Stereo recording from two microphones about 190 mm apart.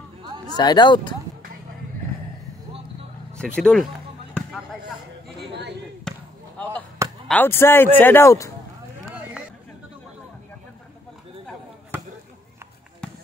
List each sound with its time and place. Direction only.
0.2 s a sound: 25° right (ahead or behind)
0.6 s speech: 20° left (ahead or behind)
3.3 s basketball bounce: centre (ahead or behind)
6.1 s basketball bounce: 5° left (ahead or behind)
7.2 s speech: 10° left (ahead or behind)
9.0 s a sound: 5° right (ahead or behind)